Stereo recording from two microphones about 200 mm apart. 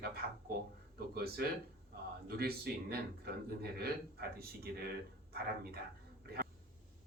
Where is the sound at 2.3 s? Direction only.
50° right (ahead or behind).